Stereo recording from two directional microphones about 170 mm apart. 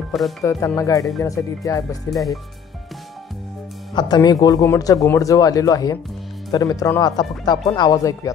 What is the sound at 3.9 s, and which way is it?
A man's voice, 25° left (ahead or behind).